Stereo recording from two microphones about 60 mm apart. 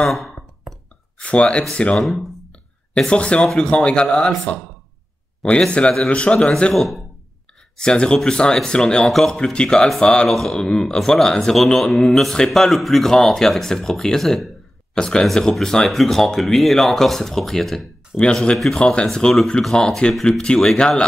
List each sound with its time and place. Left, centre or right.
0.0 s a sound: centre
1.1 s speech: centre
2.0 s speech: centre
3.0 s a man's voice: centre
5.4 s a man's voice: centre
6.7 s speech: centre
7.7 s a man's voice: centre
9.4 s a man's voice: centre